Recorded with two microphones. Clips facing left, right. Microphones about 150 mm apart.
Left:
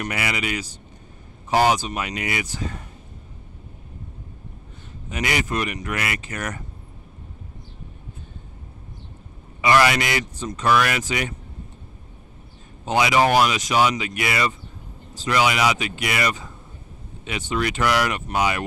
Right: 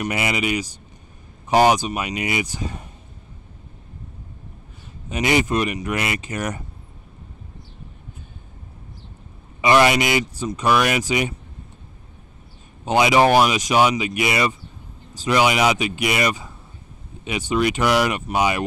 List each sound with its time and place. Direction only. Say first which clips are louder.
0.0 s speech: right 4 dB; 20° right (ahead or behind)
5.1 s speech: right 5 dB; 20° right (ahead or behind)
9.6 s speech: right 2 dB; 20° right (ahead or behind)
12.8 s speech: right 3 dB; 20° right (ahead or behind)